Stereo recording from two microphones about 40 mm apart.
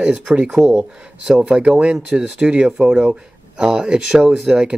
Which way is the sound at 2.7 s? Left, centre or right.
Centre.